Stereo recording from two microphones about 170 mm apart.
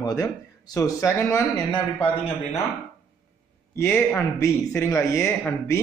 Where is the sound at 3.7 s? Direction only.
15° left (ahead or behind).